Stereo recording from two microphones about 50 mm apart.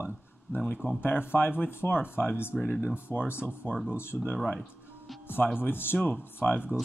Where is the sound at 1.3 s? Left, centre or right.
Left.